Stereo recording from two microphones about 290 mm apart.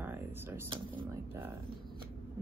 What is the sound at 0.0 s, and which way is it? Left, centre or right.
A woman's voice, centre.